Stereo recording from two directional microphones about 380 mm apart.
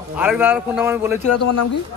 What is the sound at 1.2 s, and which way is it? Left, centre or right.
Speech, left.